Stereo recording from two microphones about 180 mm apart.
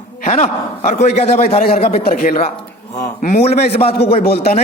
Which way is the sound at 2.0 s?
50° left (ahead or behind).